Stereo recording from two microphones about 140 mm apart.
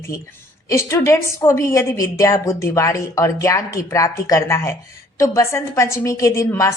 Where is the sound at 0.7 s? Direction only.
20° left (ahead or behind).